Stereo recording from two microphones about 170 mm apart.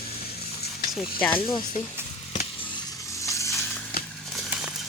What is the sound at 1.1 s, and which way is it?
Speech, 10° left (ahead or behind).